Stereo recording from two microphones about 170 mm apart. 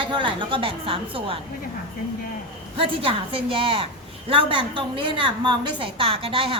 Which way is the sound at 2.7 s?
30° right (ahead or behind).